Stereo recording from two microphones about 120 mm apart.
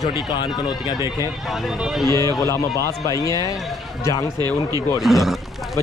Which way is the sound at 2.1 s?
25° left (ahead or behind).